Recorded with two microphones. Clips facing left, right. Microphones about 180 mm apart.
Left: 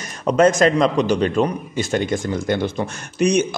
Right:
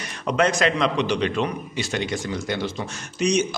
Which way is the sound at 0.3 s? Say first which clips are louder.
Left 6 dB; 45° left (ahead or behind).